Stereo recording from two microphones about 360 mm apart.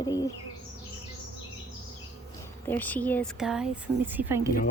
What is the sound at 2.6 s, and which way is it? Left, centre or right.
Speech, centre.